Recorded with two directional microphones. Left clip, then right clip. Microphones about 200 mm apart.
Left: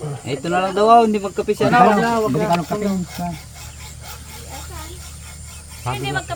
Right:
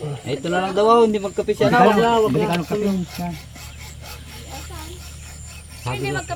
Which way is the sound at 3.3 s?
35° right (ahead or behind).